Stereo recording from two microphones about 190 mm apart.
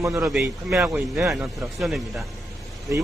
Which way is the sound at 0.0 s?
10° right (ahead or behind).